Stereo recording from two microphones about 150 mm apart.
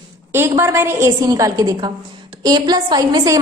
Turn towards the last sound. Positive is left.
turn(degrees=-25)  # may be behind; listen again after turning